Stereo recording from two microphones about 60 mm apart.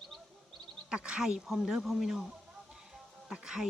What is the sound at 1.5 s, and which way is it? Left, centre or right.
Speech, centre.